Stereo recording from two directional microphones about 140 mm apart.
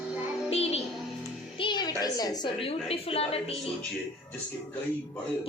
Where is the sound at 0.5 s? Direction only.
45° left (ahead or behind).